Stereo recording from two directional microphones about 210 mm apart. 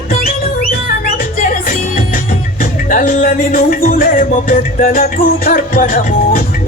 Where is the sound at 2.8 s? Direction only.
40° left (ahead or behind).